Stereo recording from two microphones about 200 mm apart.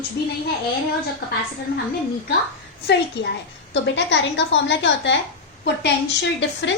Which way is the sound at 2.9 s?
55° left (ahead or behind).